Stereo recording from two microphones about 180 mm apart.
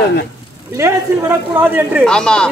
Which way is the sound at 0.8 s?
15° right (ahead or behind).